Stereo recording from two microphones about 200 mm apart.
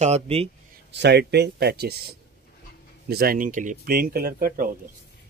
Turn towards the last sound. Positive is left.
turn(degrees=-45)  # may be behind; listen again after turning